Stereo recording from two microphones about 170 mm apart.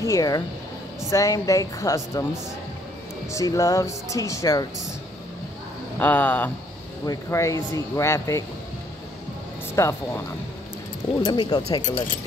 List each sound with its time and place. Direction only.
0.0 s speech: 20° left (ahead or behind)
3.3 s speech: 20° left (ahead or behind)
5.9 s speech: 10° left (ahead or behind)
9.8 s speech: 15° left (ahead or behind)
11.2 s speech: 25° left (ahead or behind)